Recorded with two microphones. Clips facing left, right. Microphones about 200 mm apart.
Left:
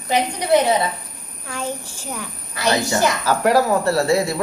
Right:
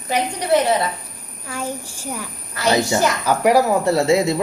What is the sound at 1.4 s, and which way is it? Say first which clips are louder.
A child's voice: even; 10° right (ahead or behind).